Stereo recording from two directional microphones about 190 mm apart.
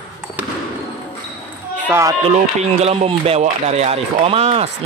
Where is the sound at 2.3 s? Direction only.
35° right (ahead or behind).